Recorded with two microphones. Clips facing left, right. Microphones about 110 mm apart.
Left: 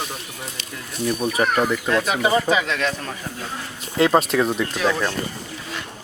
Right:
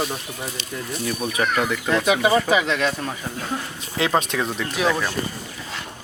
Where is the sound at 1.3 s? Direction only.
35° left (ahead or behind).